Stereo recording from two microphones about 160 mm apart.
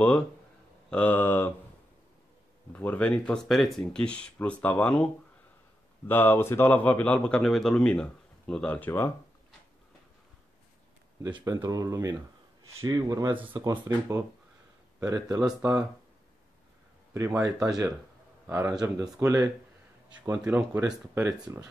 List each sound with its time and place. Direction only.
0.8 s a man's voice: 10° left (ahead or behind)
2.7 s a man's voice: 10° left (ahead or behind)
11.3 s speech: 20° right (ahead or behind)
17.1 s speech: 15° right (ahead or behind)